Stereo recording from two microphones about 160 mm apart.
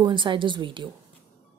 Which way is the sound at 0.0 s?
30° right (ahead or behind).